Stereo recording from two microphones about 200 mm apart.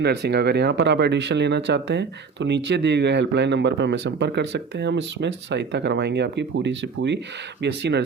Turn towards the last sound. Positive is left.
turn(degrees=-60)  # may be behind; listen again after turning